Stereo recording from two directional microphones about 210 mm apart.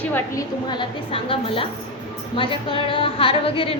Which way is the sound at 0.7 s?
25° left (ahead or behind).